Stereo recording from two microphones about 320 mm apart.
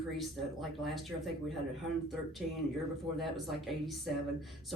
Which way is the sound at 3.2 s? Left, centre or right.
Centre.